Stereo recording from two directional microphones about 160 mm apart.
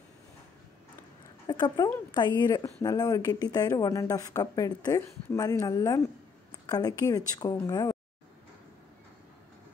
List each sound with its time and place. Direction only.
1.5 s speech: 25° left (ahead or behind)